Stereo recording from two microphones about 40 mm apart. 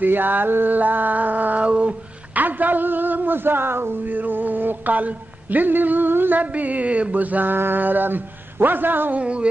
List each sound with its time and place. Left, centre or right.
0.0 s a man's voice: right
0.7 s speech: right
1.7 s mantra: right
2.3 s a man's voice: right
4.0 s speech: right
6.4 s mantra: right
7.5 s a man's voice: right
9.1 s mantra: right